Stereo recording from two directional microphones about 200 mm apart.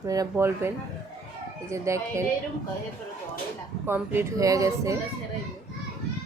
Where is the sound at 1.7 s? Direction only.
15° right (ahead or behind).